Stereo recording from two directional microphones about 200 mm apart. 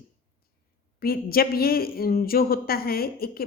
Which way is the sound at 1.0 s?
50° left (ahead or behind).